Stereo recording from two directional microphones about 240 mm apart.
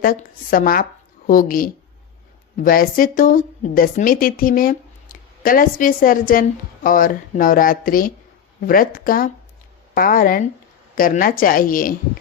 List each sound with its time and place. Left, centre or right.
0.0 s a woman's voice: left